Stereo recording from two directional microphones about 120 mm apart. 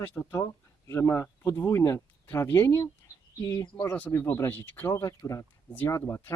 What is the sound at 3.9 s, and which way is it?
Speech, 15° left (ahead or behind).